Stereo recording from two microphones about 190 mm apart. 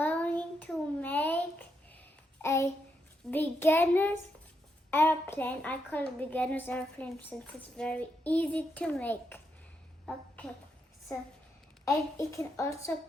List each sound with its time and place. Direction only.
0.0 s a sound: 10° left (ahead or behind)
3.2 s child singing: 10° left (ahead or behind)
4.9 s a woman's voice: 10° left (ahead or behind)